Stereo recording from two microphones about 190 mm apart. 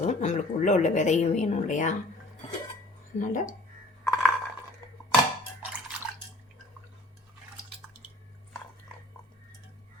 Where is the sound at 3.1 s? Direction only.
40° left (ahead or behind).